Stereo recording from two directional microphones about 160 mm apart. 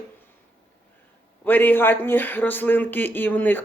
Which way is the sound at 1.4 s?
10° left (ahead or behind).